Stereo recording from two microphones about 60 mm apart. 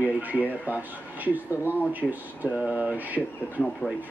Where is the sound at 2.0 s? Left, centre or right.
Centre.